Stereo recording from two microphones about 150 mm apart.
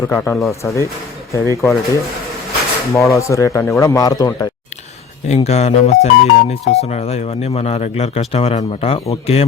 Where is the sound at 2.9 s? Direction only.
20° left (ahead or behind).